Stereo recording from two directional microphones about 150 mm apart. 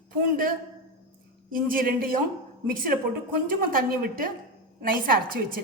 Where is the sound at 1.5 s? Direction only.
70° right (ahead or behind).